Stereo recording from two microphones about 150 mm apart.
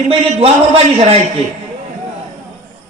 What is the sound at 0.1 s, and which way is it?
A man's voice, 40° right (ahead or behind).